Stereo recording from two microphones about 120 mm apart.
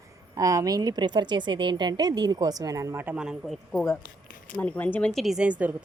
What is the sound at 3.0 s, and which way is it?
Speech, 5° right (ahead or behind).